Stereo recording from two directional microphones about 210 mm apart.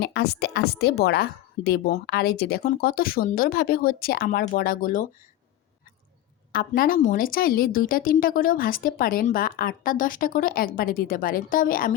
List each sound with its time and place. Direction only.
0.0 s a woman's voice: 50° left (ahead or behind)
6.5 s a woman's voice: 45° left (ahead or behind)